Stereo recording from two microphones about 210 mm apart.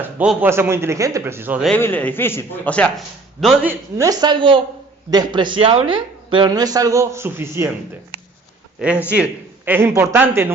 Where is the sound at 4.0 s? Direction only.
20° right (ahead or behind).